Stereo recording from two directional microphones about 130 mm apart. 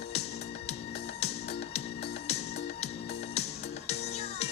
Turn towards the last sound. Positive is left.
turn(degrees=55)  # may be behind; listen again after turning